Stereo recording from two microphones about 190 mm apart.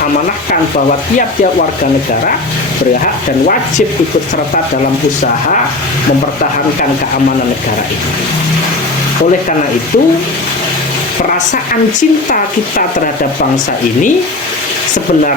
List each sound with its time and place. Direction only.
11.9 s speech: 45° left (ahead or behind)